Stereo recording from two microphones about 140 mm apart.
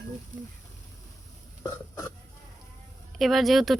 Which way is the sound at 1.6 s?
25° left (ahead or behind).